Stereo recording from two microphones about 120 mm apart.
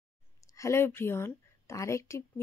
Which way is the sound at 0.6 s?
20° left (ahead or behind).